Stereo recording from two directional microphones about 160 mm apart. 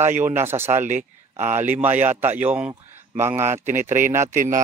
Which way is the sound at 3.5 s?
50° right (ahead or behind).